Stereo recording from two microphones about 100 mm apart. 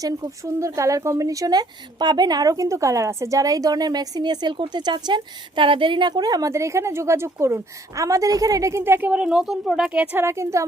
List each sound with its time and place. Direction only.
0.0 s speech: 35° right (ahead or behind)
8.8 s a woman's voice: 20° right (ahead or behind)
10.2 s a woman's voice: 30° right (ahead or behind)